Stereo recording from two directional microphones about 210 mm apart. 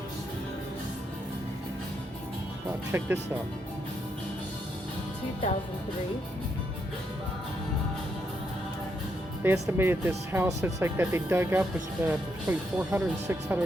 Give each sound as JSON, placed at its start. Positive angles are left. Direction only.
{"t": 2.9, "sound": "speech", "side_deg": -10}
{"t": 9.4, "sound": "speech", "side_deg": -10}